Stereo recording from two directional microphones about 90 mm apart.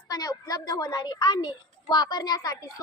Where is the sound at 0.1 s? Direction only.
45° left (ahead or behind).